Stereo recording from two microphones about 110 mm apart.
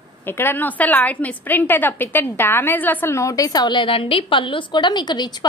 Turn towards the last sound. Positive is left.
turn(degrees=40)  # may be behind; listen again after turning